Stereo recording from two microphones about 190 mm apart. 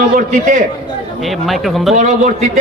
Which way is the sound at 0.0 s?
45° right (ahead or behind).